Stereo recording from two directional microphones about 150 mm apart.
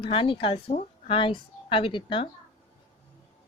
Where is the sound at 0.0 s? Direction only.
35° left (ahead or behind).